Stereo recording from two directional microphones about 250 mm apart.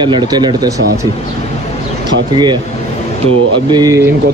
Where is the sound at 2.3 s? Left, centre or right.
Centre.